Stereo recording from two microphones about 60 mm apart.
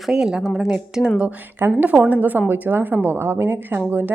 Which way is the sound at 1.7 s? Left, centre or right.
Right.